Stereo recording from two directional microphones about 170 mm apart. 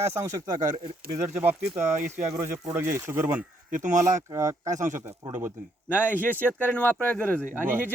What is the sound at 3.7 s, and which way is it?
Speech, 50° right (ahead or behind).